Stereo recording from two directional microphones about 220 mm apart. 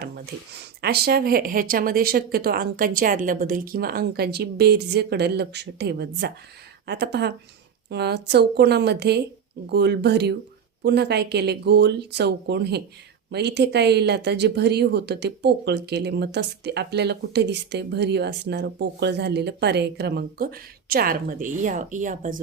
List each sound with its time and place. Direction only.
0.5 s speech: 45° right (ahead or behind)